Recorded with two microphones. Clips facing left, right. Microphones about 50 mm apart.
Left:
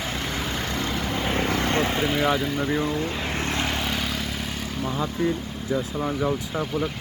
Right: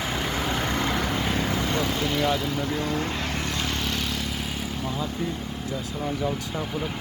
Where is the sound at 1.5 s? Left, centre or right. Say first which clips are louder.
Left 2 dB; left.